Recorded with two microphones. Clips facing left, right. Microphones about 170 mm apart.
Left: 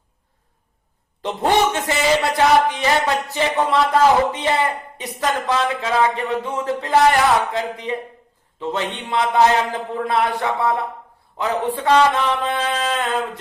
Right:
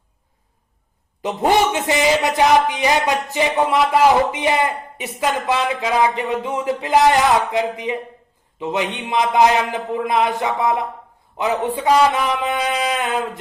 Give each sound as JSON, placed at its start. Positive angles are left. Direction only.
{"t": 1.2, "sound": "a man's voice", "side_deg": -10}